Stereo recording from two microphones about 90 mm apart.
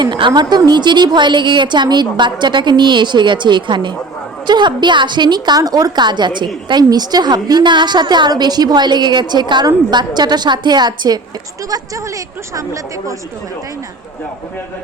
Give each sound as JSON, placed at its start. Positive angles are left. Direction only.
{"t": 0.0, "sound": "a woman's voice", "side_deg": -60}
{"t": 11.7, "sound": "speech", "side_deg": -40}